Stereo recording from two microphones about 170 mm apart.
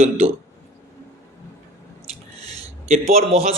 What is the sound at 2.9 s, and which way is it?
Speech, 35° right (ahead or behind).